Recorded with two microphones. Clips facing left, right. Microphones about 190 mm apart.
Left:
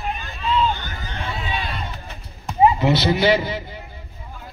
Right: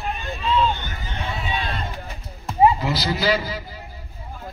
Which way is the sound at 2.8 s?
25° left (ahead or behind).